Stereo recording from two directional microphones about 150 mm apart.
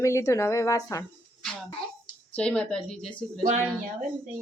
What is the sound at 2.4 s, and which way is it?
Speech, 5° left (ahead or behind).